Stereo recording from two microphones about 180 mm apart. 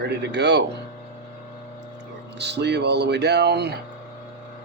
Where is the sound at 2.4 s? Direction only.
70° right (ahead or behind).